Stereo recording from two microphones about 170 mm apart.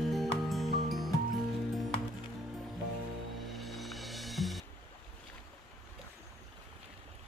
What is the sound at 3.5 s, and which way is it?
Music, centre (ahead or behind).